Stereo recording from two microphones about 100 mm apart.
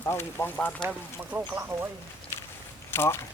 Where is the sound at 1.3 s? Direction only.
20° right (ahead or behind).